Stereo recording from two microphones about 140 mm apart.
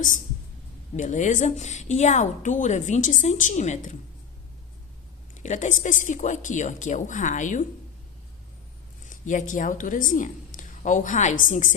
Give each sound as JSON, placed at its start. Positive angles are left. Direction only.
{"t": 0.9, "sound": "a woman's voice", "side_deg": 60}
{"t": 5.3, "sound": "a woman's voice", "side_deg": 60}
{"t": 9.0, "sound": "a woman's voice", "side_deg": 65}